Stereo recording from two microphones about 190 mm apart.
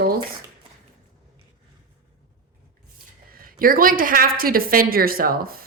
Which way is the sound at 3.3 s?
50° right (ahead or behind).